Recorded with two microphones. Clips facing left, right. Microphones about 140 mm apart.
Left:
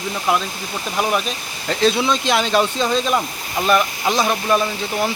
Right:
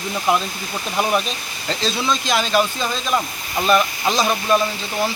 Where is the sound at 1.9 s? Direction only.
20° left (ahead or behind).